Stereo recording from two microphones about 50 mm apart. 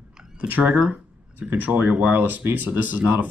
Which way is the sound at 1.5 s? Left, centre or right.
Right.